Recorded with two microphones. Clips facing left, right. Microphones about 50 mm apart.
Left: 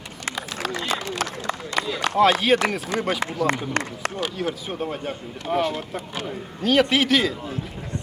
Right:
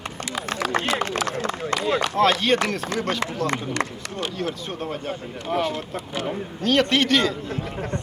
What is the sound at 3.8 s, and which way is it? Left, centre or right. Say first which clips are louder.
Speech: even; left.